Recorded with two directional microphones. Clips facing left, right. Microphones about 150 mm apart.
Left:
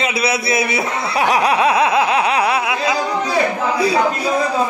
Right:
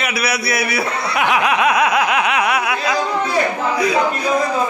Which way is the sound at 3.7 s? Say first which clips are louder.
Left 1 dB; 30° left (ahead or behind).